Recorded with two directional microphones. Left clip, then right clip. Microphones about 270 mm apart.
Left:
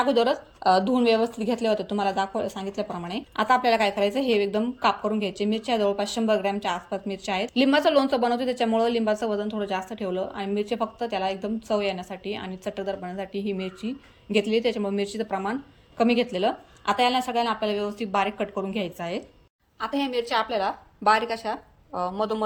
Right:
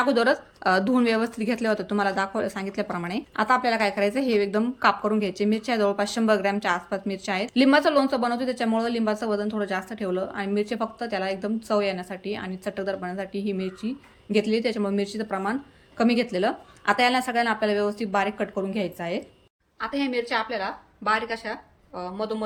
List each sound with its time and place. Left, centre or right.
0.0 s a woman's voice: centre
19.8 s speech: left